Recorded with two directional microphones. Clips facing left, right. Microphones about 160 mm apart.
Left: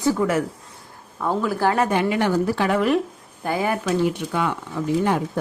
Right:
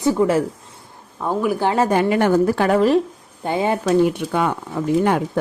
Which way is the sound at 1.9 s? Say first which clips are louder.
Right 4 dB; 45° right (ahead or behind).